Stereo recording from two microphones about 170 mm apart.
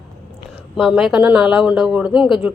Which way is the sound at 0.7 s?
Centre (ahead or behind).